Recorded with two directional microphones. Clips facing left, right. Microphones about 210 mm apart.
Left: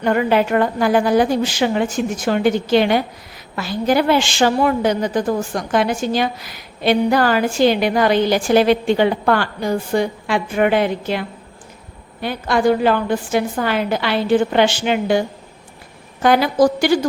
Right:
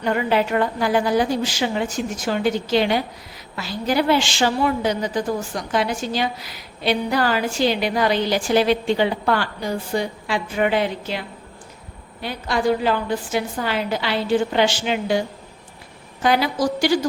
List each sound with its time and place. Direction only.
0.0 s a woman's voice: 55° left (ahead or behind)
12.2 s a woman's voice: 55° left (ahead or behind)
16.2 s a woman's voice: 50° left (ahead or behind)